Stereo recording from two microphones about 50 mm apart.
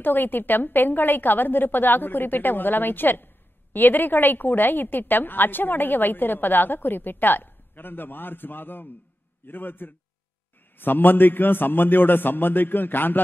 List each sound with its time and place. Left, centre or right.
0.0 s a woman's voice: left